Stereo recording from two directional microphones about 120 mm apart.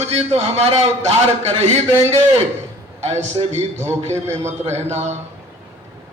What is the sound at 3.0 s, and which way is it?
A man's voice, 70° right (ahead or behind).